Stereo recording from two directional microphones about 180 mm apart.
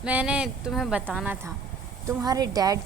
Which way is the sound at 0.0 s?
5° right (ahead or behind).